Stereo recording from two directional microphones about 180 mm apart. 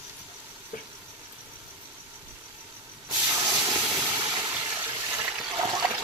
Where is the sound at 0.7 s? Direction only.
45° left (ahead or behind).